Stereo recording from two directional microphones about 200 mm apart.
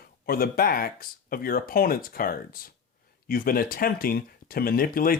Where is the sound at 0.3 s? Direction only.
45° left (ahead or behind).